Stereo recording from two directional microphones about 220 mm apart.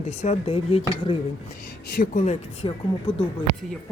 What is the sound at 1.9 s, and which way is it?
Speech, 40° left (ahead or behind).